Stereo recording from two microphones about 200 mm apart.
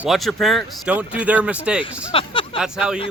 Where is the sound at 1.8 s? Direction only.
25° left (ahead or behind).